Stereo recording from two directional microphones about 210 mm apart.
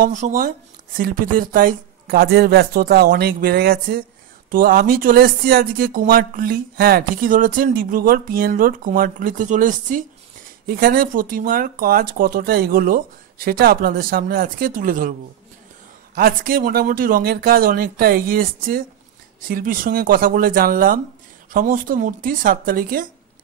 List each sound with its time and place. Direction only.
0.0 s speech: 40° right (ahead or behind)
16.2 s speech: 45° right (ahead or behind)